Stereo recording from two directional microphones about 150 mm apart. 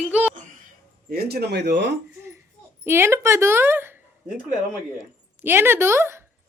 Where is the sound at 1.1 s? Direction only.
90° right.